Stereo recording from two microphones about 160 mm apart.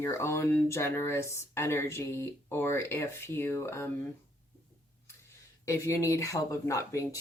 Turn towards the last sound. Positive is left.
turn(degrees=20)  # may be behind; listen again after turning